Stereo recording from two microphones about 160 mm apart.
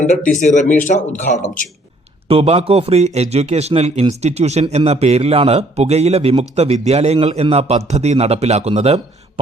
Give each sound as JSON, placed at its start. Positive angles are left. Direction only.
{"t": 0.0, "sound": "speech", "side_deg": 50}
{"t": 2.2, "sound": "a man's voice", "side_deg": -40}